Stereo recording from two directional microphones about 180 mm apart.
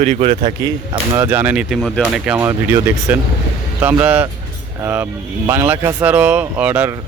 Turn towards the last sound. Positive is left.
turn(degrees=-10)  # may be behind; listen again after turning